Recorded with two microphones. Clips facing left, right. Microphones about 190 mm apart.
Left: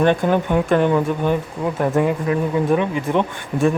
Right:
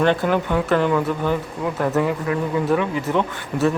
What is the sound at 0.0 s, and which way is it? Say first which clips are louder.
Speech: left 2 dB; 15° left (ahead or behind).